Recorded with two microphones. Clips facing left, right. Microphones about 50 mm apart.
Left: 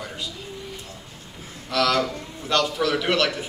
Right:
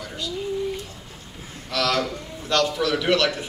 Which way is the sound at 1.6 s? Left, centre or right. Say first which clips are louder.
Left 2 dB; centre.